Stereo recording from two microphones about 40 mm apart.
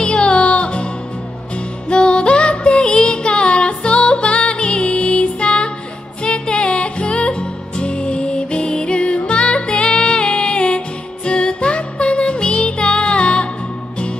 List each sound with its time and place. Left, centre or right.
0.0 s music: left